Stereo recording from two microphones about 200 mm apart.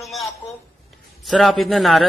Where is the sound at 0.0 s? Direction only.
Centre (ahead or behind).